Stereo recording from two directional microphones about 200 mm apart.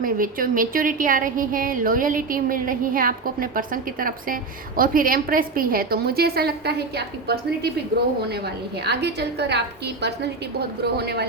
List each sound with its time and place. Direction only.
0.0 s a woman's voice: 45° right (ahead or behind)
8.8 s a woman's voice: 55° right (ahead or behind)